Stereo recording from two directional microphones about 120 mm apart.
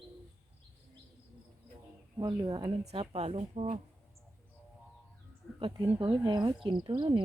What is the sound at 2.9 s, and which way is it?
Speech, 55° right (ahead or behind).